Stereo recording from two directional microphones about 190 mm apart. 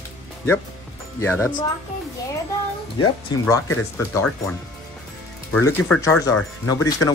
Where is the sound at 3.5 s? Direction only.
15° left (ahead or behind).